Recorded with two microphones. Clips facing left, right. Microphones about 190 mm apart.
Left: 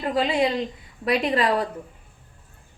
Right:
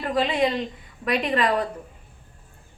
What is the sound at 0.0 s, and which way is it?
A woman's voice, 25° left (ahead or behind).